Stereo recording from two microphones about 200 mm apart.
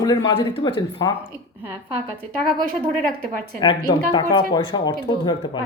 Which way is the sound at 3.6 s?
25° left (ahead or behind).